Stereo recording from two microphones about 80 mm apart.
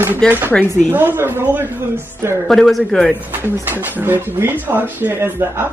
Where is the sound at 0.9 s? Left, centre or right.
Right.